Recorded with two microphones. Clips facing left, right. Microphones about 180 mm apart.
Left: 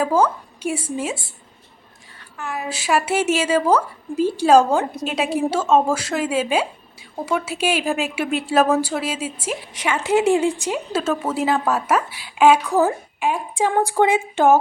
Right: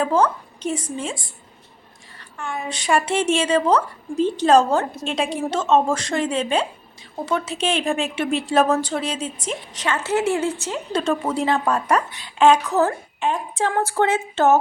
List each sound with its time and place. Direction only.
0.0 s speech: 10° left (ahead or behind)
2.4 s speech: 5° left (ahead or behind)